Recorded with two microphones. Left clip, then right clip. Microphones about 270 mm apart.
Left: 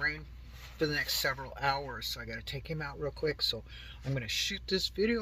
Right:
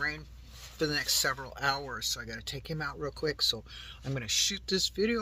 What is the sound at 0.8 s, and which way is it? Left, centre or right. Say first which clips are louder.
Speech: right 2 dB; centre.